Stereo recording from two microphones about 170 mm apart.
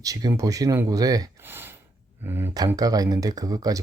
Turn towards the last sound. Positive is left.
turn(degrees=-20)  # may be behind; listen again after turning